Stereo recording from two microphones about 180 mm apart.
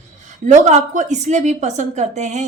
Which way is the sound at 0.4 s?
40° right (ahead or behind).